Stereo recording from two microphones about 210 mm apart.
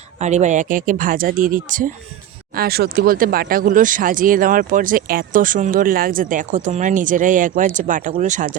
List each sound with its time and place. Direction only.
0.2 s speech: 35° right (ahead or behind)